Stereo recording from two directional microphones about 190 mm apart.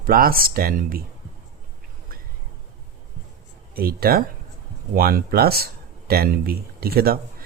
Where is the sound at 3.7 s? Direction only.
50° right (ahead or behind).